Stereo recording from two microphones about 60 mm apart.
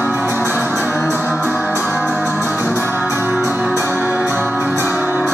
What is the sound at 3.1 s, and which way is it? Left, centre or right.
Music, right.